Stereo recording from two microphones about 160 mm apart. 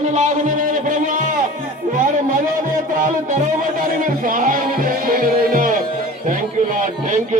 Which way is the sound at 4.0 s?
55° right (ahead or behind).